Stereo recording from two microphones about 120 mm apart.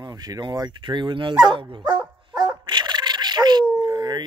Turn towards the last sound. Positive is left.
turn(degrees=-35)  # may be behind; listen again after turning